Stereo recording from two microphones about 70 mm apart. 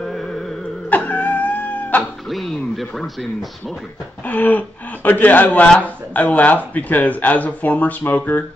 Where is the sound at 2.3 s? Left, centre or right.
Centre.